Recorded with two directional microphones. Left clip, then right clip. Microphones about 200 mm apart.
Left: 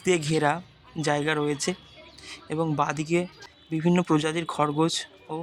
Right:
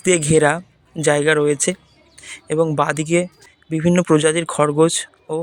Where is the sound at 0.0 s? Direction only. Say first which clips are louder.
Right 9 dB; 20° right (ahead or behind).